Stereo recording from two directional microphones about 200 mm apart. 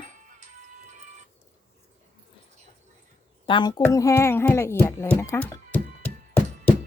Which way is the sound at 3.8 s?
15° left (ahead or behind).